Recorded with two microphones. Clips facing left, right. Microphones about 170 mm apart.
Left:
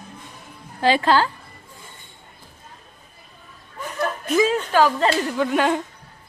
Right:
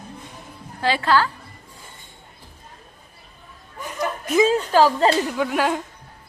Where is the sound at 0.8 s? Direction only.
20° left (ahead or behind).